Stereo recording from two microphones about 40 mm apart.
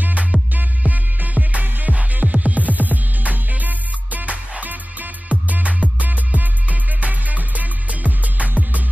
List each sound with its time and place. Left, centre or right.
0.0 s music: right